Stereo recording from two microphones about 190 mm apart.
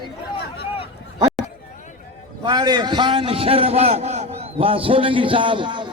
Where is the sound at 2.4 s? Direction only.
20° right (ahead or behind).